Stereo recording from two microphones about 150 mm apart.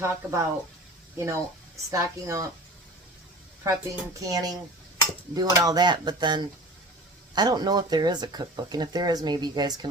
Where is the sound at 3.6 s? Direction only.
20° right (ahead or behind).